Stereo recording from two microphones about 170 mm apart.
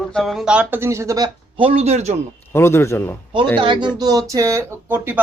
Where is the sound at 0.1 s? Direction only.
Centre (ahead or behind); by 2.1 s 40° right (ahead or behind).